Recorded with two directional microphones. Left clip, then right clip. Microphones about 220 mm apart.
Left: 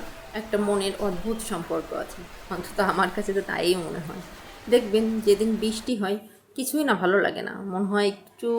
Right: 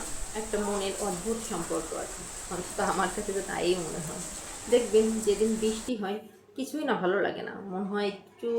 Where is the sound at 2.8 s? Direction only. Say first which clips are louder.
Left 5 dB; 50° left (ahead or behind).